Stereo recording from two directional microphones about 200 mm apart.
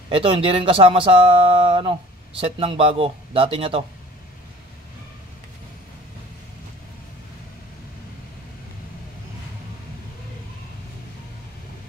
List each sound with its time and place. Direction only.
0.1 s speech: 25° right (ahead or behind)